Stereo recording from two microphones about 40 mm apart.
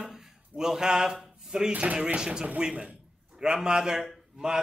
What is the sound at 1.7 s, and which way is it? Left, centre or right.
Speech, right.